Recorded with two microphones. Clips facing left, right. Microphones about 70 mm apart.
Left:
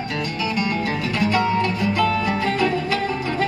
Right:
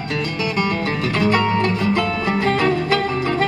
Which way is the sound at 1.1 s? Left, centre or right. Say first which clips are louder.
Right 2 dB; right.